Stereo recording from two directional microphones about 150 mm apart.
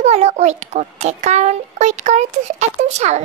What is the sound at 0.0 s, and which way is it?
A woman's voice, 45° right (ahead or behind).